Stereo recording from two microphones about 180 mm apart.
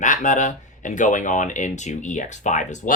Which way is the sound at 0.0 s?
45° left (ahead or behind).